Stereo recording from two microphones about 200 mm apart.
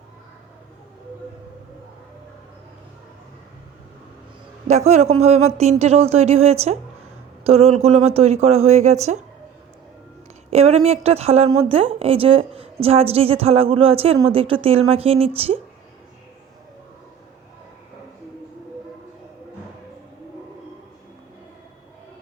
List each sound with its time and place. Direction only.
4.7 s speech: 35° right (ahead or behind)
10.5 s a woman's voice: 30° right (ahead or behind)